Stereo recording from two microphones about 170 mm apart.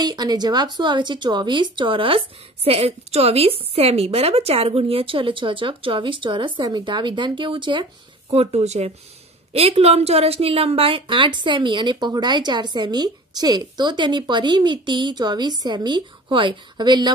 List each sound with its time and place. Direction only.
0.0 s speech: 25° right (ahead or behind)